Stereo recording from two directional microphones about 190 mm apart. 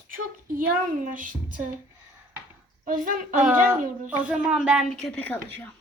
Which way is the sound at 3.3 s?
10° right (ahead or behind).